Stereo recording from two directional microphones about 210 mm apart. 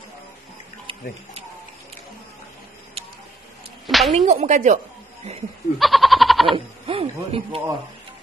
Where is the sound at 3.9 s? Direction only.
Centre (ahead or behind).